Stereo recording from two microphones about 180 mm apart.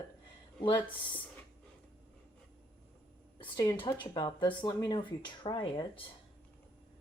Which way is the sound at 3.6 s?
25° left (ahead or behind).